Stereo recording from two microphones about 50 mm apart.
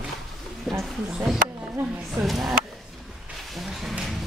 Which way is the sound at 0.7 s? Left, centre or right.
Centre.